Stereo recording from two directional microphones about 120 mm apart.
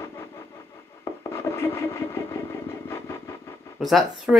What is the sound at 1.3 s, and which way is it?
Wood, 20° left (ahead or behind).